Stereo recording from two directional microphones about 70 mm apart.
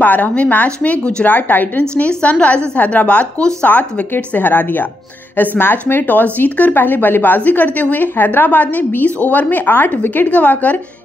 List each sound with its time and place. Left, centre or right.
0.0 s speech: left